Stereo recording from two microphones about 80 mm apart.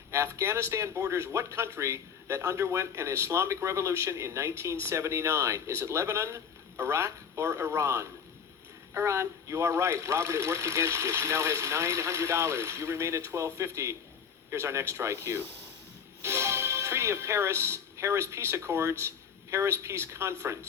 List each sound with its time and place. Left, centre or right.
0.1 s speech: right